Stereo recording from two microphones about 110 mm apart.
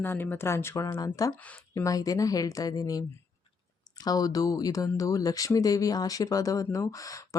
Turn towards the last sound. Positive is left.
turn(degrees=30)  # may be behind; listen again after turning